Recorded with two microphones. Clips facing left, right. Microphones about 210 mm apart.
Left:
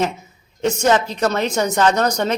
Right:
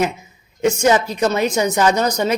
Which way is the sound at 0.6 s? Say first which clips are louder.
Right 2 dB; 10° right (ahead or behind).